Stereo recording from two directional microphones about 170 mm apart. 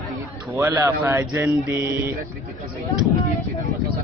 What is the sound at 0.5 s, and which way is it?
Speech, 15° right (ahead or behind).